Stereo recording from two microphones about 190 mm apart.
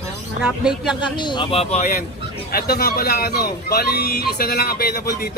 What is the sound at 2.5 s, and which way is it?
Speech, 55° left (ahead or behind).